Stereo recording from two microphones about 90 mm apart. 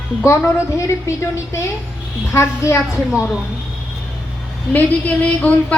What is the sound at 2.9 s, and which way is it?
Speech, 10° right (ahead or behind).